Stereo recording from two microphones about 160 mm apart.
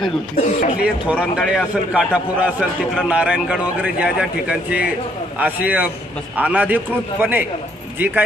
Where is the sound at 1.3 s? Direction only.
5° right (ahead or behind).